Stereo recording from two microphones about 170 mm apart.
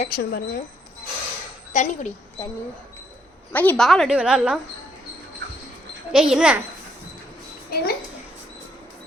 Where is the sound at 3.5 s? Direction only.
10° left (ahead or behind).